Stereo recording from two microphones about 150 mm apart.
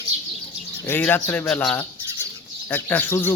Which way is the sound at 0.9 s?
15° left (ahead or behind).